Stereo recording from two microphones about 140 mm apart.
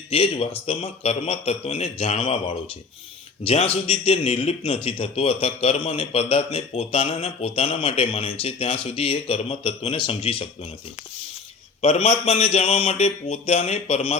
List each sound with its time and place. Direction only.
0.1 s a man's voice: 45° left (ahead or behind)
11.8 s a man's voice: 45° left (ahead or behind)